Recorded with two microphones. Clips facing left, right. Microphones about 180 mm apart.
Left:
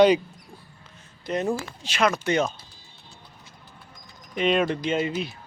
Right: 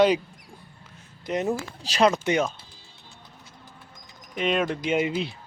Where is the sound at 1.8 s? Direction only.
35° right (ahead or behind).